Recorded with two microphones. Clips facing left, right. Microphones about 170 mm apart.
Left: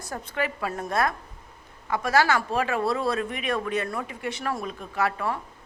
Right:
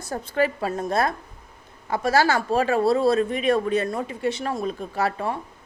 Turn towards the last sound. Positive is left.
turn(degrees=-30)  # may be behind; listen again after turning